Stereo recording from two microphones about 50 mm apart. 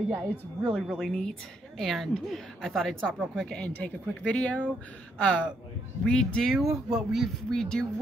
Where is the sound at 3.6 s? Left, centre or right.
Left.